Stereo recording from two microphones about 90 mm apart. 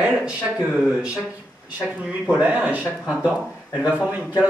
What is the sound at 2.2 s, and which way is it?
Speech, 15° right (ahead or behind).